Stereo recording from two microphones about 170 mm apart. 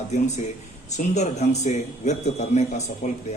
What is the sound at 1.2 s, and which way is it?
Speech, 40° left (ahead or behind).